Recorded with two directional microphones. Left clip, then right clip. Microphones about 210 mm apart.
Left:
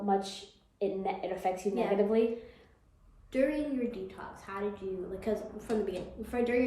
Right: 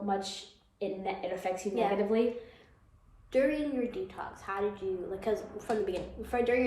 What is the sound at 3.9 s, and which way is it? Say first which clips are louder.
Speech: right 3 dB; 10° right (ahead or behind).